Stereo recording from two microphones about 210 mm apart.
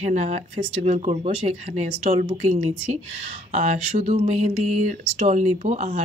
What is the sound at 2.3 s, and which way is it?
Speech, 30° right (ahead or behind).